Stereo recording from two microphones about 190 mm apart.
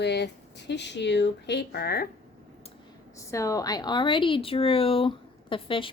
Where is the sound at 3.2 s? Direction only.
15° left (ahead or behind).